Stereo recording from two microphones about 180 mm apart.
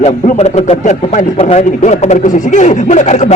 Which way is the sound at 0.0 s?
35° left (ahead or behind).